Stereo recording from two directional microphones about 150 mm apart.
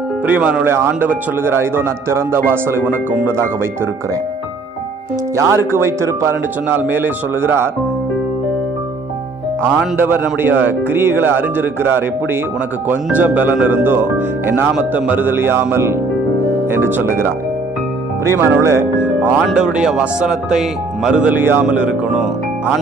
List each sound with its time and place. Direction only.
0.3 s a man's voice: 10° right (ahead or behind)
5.3 s a man's voice: 15° right (ahead or behind)
9.9 s a man's voice: 15° right (ahead or behind)
18.4 s speech: 15° right (ahead or behind)
19.3 s a man's voice: 5° right (ahead or behind)